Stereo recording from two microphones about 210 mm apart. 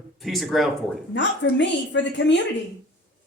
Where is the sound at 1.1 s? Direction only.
60° left (ahead or behind).